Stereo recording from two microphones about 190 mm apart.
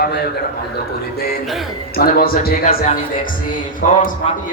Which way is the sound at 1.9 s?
50° left (ahead or behind).